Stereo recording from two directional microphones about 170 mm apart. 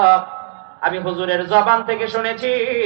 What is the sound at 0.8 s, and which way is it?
Speech, 20° left (ahead or behind).